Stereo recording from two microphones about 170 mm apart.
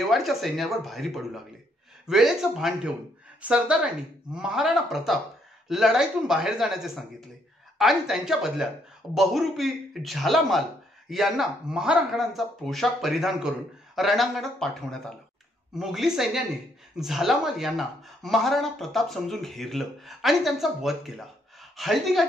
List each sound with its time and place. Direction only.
0.0 s speech: centre (ahead or behind)